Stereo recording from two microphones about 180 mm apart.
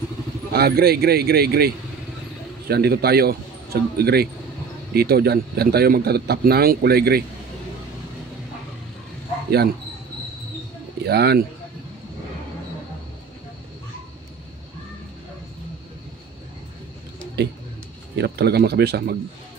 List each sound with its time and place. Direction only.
0.5 s speech: 60° right (ahead or behind)
2.7 s speech: 60° right (ahead or behind)
11.1 s speech: 65° right (ahead or behind)
17.4 s speech: 65° right (ahead or behind)